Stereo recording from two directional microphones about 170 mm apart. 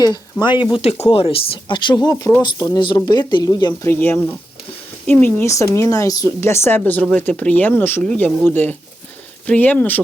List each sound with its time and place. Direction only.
0.0 s speech: 25° left (ahead or behind)
0.4 s speech: 10° right (ahead or behind)
0.7 s speech: 35° left (ahead or behind)
3.8 s speech: 10° left (ahead or behind)